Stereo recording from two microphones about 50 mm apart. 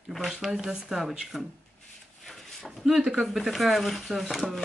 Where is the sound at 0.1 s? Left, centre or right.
Centre.